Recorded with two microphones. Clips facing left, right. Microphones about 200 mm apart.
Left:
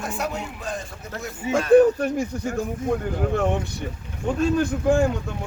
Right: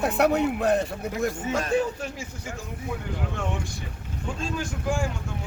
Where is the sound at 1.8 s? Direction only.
60° left (ahead or behind).